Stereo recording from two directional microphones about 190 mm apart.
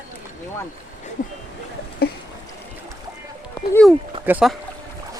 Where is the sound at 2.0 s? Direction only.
55° left (ahead or behind).